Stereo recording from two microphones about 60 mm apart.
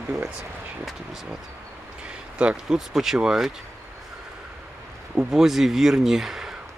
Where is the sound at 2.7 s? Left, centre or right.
Centre.